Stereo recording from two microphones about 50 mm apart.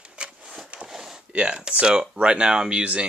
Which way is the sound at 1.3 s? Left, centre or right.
Right.